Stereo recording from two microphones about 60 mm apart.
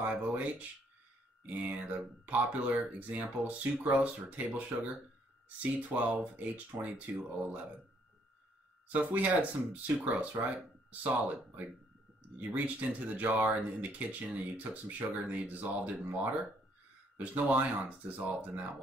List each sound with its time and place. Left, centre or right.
0.0 s speech: right
8.8 s speech: right